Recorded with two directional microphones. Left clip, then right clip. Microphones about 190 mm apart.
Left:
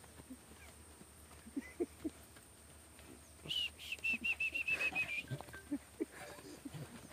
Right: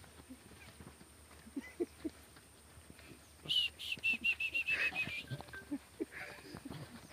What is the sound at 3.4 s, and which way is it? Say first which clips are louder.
Bird: right 5 dB; 45° right (ahead or behind).